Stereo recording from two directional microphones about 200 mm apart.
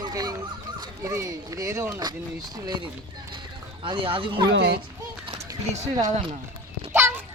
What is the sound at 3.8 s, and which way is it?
Speech, 25° right (ahead or behind).